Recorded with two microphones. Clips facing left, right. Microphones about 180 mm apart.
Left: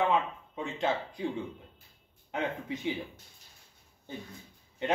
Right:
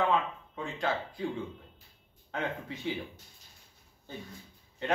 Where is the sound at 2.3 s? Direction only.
20° left (ahead or behind).